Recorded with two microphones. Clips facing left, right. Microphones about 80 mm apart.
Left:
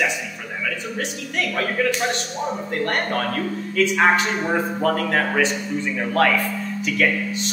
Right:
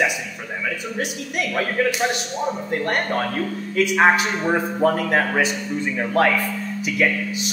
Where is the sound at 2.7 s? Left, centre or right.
Centre.